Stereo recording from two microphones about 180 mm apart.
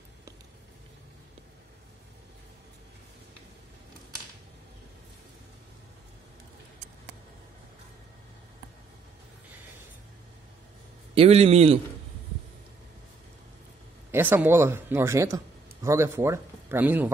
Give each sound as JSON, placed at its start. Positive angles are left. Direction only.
{"t": 11.1, "sound": "a man's voice", "side_deg": -35}
{"t": 14.1, "sound": "a man's voice", "side_deg": -10}